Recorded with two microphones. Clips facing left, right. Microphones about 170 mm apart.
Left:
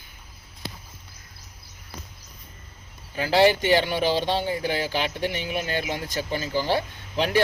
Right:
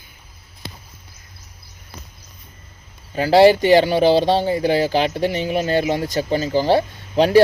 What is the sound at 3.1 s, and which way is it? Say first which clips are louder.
Speech: right 7 dB; 35° right (ahead or behind).